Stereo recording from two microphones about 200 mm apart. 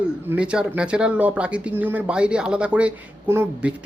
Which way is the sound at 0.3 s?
5° right (ahead or behind).